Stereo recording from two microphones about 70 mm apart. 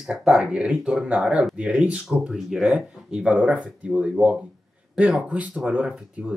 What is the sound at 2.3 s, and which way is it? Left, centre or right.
Speech, centre.